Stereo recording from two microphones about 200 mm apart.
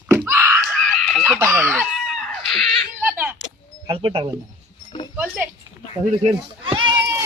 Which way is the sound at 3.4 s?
25° right (ahead or behind).